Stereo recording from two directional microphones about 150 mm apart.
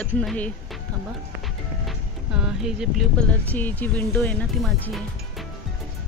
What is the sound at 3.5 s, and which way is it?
Speech, 10° left (ahead or behind).